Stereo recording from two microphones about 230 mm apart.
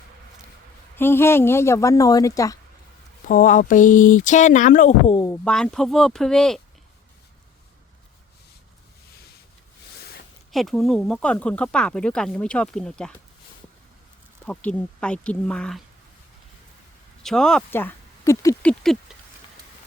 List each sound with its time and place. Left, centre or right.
0.9 s speech: centre
3.2 s speech: left; by 6.6 s centre
10.5 s speech: centre
14.4 s speech: centre
17.2 s speech: centre